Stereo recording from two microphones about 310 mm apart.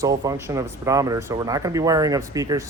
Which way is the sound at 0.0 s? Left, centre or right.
Centre.